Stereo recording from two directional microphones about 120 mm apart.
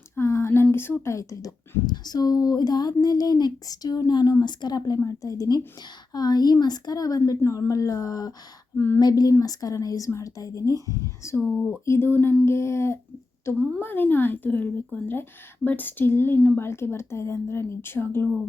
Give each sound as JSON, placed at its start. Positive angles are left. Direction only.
{"t": 0.2, "sound": "speech", "side_deg": 20}
{"t": 9.0, "sound": "speech", "side_deg": 35}